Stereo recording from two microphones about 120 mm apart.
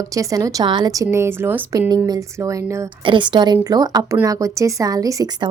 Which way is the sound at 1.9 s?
35° right (ahead or behind).